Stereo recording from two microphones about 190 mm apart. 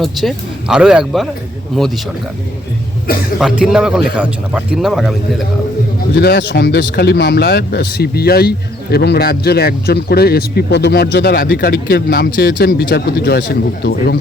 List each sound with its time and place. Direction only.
0.0 s speech: centre (ahead or behind)
3.1 s speech: 50° left (ahead or behind)
3.4 s speech: 5° right (ahead or behind)
6.1 s speech: 60° left (ahead or behind)